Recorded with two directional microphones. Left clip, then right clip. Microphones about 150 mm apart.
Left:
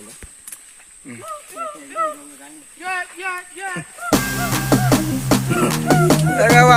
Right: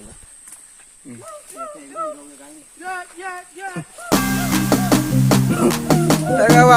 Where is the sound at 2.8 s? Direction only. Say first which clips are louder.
Left 4 dB; 90° right.